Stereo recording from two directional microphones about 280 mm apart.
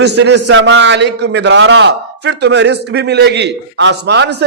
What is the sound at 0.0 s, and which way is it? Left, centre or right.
A man's voice, right.